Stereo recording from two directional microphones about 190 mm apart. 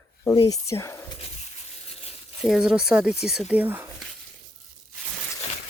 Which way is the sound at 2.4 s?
5° right (ahead or behind).